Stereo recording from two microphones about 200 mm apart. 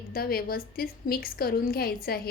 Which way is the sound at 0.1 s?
50° left (ahead or behind).